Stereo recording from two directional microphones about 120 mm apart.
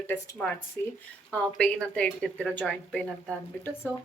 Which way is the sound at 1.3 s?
5° left (ahead or behind).